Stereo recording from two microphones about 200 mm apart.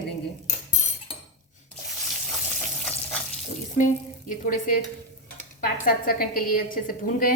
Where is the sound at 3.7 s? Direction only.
40° left (ahead or behind).